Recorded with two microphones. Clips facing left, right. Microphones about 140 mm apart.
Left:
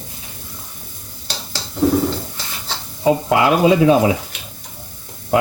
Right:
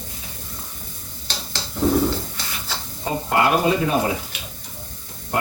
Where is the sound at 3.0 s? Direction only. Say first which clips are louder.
Left 6 dB; 90° left.